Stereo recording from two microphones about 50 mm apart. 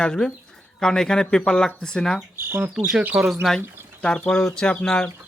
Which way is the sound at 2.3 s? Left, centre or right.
Right.